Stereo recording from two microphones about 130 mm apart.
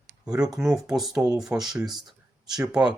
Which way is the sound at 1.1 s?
30° right (ahead or behind).